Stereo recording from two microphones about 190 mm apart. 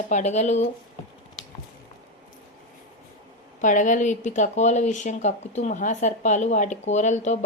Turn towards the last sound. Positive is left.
turn(degrees=40)  # may be behind; listen again after turning